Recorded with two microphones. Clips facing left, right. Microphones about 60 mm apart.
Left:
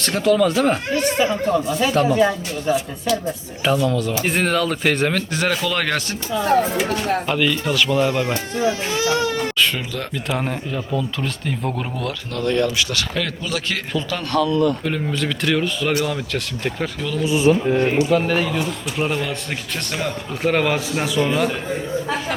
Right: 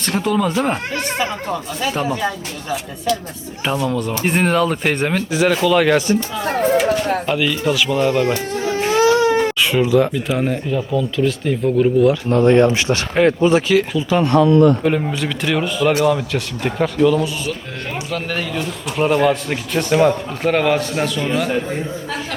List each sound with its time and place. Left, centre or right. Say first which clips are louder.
0.0 s speech: left 2 dB; centre
1.2 s speech: left 4 dB; centre
1.9 s speech: left 2 dB; centre
2.1 s speech: left 5 dB; centre
3.6 s speech: left 1 dB; centre
8.6 s baby cry: right 6 dB; right
9.6 s speech: right 7 dB; centre
12.3 s speech: right 5 dB; right
13.7 s speech: right 8 dB; centre
14.1 s speech: right 7 dB; right
17.2 s speech: left 9 dB; left
18.1 s speech: left 5 dB; centre
20.4 s speech: right 2 dB; centre